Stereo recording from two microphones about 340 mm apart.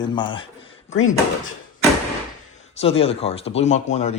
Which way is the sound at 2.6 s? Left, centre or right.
Centre.